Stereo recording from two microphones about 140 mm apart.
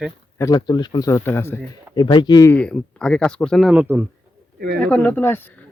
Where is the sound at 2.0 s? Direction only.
30° left (ahead or behind).